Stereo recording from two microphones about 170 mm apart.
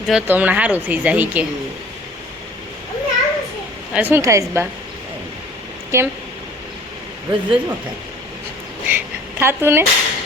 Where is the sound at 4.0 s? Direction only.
15° right (ahead or behind).